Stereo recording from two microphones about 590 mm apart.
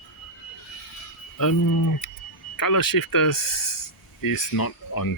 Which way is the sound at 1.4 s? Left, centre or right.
Left.